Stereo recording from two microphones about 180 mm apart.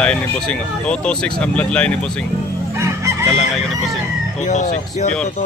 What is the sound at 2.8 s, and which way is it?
Chicken, 15° right (ahead or behind).